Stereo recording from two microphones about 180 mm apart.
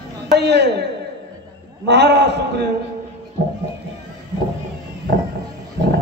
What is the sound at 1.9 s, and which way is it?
Speech, 70° right (ahead or behind).